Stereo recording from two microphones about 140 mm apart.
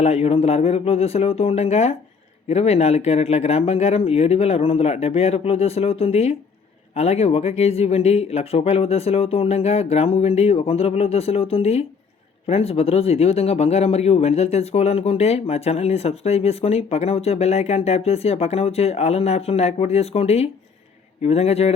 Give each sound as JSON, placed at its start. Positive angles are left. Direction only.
{"t": 0.0, "sound": "speech", "side_deg": 45}